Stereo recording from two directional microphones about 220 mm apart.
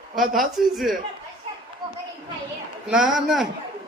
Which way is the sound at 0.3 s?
Centre (ahead or behind).